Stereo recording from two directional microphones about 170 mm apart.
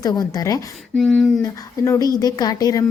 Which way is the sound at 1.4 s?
20° left (ahead or behind).